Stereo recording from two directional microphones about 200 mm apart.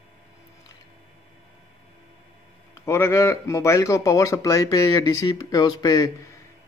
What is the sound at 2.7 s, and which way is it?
A man's voice, 15° left (ahead or behind).